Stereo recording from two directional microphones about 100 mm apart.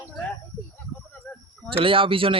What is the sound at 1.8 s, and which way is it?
Speech, 60° right (ahead or behind).